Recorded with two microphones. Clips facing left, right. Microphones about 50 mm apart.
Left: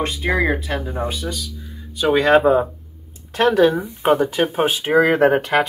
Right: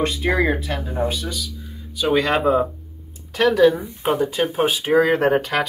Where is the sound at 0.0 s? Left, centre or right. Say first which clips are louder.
Even; centre.